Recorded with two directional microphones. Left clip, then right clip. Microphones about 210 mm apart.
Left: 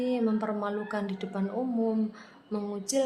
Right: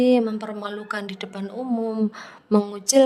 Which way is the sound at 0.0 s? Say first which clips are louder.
Right 9 dB; 45° right (ahead or behind).